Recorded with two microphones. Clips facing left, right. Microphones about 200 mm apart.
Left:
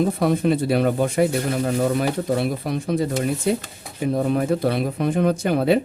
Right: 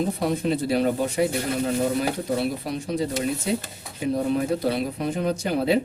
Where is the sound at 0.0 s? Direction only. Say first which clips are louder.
Left 5 dB; 60° left (ahead or behind).